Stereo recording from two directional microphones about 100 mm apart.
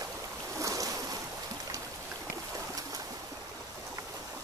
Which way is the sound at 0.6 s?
35° right (ahead or behind).